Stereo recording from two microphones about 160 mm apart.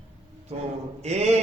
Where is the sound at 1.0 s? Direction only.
45° right (ahead or behind).